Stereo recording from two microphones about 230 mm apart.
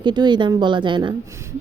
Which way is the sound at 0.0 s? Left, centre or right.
Centre.